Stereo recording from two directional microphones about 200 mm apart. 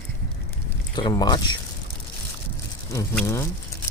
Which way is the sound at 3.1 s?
10° left (ahead or behind).